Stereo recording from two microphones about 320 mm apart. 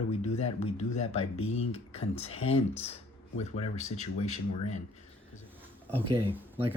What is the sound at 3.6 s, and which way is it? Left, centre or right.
Speech, left.